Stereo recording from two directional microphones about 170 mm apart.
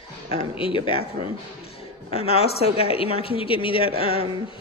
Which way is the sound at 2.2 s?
35° left (ahead or behind).